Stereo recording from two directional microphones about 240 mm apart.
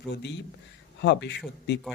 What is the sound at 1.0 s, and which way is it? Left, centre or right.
Speech, left.